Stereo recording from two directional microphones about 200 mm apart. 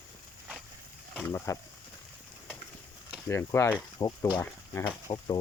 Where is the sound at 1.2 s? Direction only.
10° left (ahead or behind).